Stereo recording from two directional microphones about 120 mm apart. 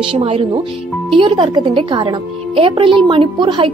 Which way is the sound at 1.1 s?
40° right (ahead or behind).